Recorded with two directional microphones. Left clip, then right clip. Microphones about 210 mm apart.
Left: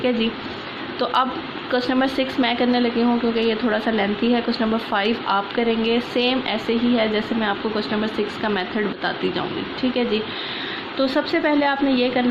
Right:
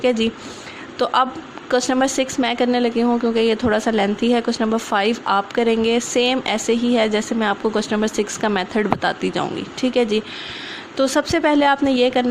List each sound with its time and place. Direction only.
0.0 s speech: 40° right (ahead or behind)